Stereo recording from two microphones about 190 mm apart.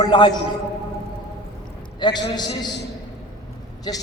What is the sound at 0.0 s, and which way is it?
Speech, 20° left (ahead or behind).